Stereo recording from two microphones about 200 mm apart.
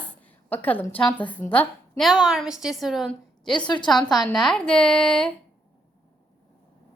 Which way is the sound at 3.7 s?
20° left (ahead or behind).